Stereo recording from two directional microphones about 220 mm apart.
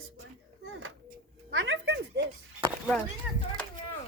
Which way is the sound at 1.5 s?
60° right (ahead or behind).